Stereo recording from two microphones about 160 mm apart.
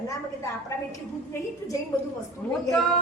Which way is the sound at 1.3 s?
20° left (ahead or behind).